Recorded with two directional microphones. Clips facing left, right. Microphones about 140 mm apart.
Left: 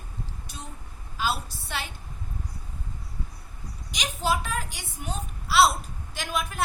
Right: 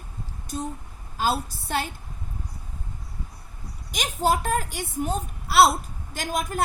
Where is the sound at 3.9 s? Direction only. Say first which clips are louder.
Right 4 dB; 50° right (ahead or behind).